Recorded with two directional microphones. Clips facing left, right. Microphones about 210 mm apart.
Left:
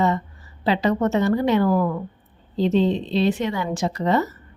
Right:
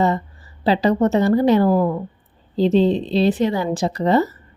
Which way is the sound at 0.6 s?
35° right (ahead or behind).